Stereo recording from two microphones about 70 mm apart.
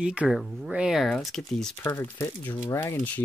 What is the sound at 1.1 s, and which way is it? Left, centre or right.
Speech, centre.